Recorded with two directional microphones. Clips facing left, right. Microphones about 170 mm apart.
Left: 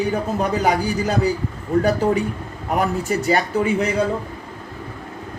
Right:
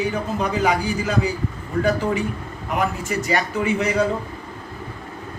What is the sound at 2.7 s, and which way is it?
A man's voice, 35° left (ahead or behind).